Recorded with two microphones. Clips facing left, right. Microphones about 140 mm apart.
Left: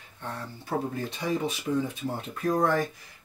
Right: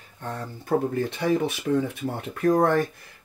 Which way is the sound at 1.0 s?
65° right (ahead or behind).